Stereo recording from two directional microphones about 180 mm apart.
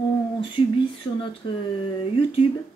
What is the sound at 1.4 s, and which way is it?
Speech, 25° left (ahead or behind).